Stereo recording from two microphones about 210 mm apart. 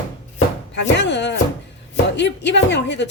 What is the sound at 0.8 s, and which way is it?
A woman's voice, 55° left (ahead or behind).